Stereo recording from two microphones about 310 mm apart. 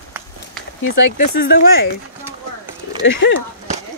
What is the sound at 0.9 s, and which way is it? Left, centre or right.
Speech, left.